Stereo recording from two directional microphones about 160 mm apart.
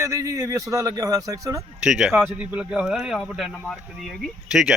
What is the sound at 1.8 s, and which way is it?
Speech, 5° right (ahead or behind).